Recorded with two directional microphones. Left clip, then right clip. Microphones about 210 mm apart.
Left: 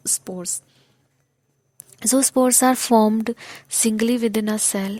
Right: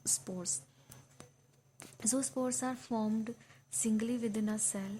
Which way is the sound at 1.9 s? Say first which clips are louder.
Left 17 dB; 40° left (ahead or behind).